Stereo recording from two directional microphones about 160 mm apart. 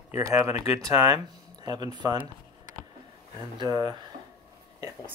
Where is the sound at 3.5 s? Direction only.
25° right (ahead or behind).